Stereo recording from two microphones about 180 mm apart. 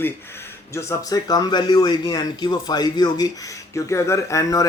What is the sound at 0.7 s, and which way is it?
A man's voice, 15° left (ahead or behind).